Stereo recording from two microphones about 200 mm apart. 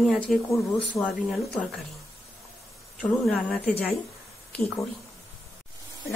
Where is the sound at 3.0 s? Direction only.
Centre (ahead or behind).